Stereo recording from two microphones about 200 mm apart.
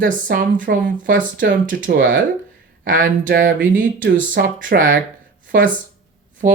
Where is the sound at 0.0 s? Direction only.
45° right (ahead or behind).